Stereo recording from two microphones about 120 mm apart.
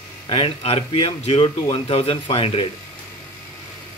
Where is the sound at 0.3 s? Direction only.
55° left (ahead or behind).